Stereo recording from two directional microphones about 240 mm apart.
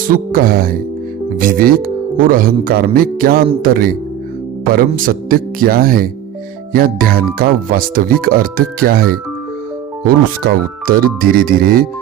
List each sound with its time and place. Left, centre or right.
0.1 s speech: right
10.4 s speech: right